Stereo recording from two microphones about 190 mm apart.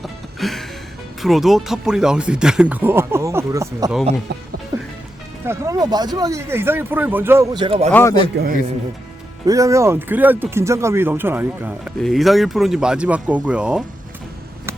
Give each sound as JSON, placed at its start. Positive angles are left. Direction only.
{"t": 0.0, "sound": "a sound", "side_deg": 0}
{"t": 1.2, "sound": "speech", "side_deg": 0}
{"t": 5.5, "sound": "speech", "side_deg": -15}
{"t": 7.9, "sound": "a man's voice", "side_deg": 10}
{"t": 8.4, "sound": "a man's voice", "side_deg": -60}
{"t": 9.5, "sound": "speech", "side_deg": -15}
{"t": 12.0, "sound": "speech", "side_deg": 0}